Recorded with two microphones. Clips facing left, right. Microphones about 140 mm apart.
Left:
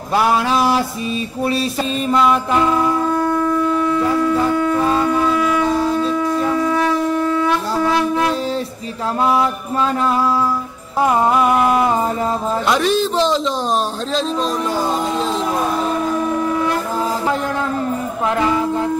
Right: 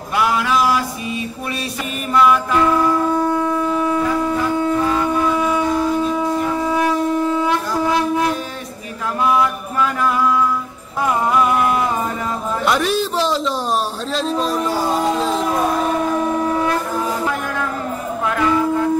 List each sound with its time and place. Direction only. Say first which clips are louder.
0.1 s a sound: left 2 dB; 30° left (ahead or behind)
2.1 s music: right 2 dB; 25° left (ahead or behind)
3.1 s shofar: left 1 dB; 10° right (ahead or behind); by 4.7 s 25° right (ahead or behind)
6.0 s shofar: left 1 dB; 20° right (ahead or behind)
9.2 s music: even; 30° left (ahead or behind)
12.6 s a man's voice: left 1 dB; 5° right (ahead or behind)
18.2 s music: even; 25° left (ahead or behind)